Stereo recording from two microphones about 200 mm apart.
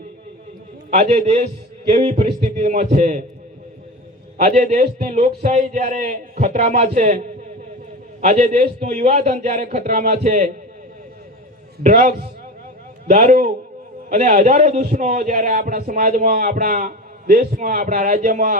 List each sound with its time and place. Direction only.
0.9 s a man's voice: 40° right (ahead or behind)
4.5 s a man's voice: 35° right (ahead or behind)
8.2 s a man's voice: 35° right (ahead or behind)
11.8 s a man's voice: 40° right (ahead or behind)